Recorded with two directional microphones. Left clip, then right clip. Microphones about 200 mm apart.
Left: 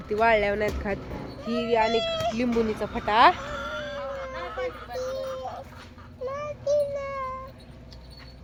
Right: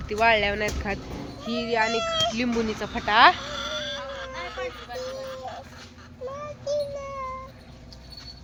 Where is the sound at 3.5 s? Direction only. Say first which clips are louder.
Right 2 dB; 40° left (ahead or behind).